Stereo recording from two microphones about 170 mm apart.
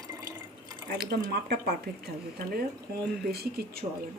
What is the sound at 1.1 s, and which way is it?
Speech, 70° right (ahead or behind).